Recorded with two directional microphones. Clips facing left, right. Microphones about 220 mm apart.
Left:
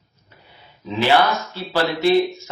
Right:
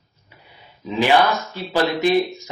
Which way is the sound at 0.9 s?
15° right (ahead or behind).